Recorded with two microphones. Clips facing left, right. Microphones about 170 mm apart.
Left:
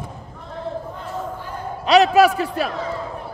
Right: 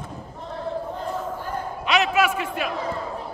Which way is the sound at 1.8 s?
35° left (ahead or behind).